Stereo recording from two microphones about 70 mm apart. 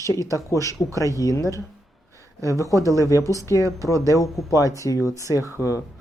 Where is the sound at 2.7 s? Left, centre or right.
Right.